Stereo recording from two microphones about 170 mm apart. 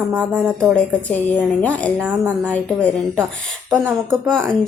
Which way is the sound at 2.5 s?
10° left (ahead or behind).